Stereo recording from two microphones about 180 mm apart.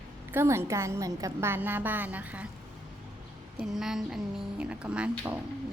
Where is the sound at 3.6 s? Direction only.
Centre (ahead or behind).